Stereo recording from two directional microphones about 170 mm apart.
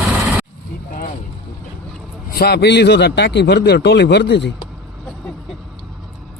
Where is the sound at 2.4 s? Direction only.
70° left (ahead or behind).